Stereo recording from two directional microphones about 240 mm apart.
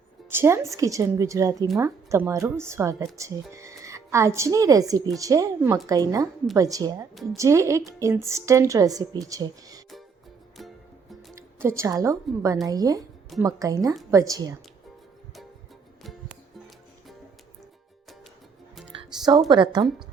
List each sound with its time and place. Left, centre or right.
0.3 s a woman's voice: centre
10.6 s music: centre
11.3 s a woman's voice: centre
18.9 s music: centre
19.5 s a woman's voice: centre